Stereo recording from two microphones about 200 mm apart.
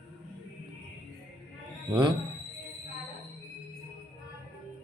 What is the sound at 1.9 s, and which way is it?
Speech, 25° right (ahead or behind).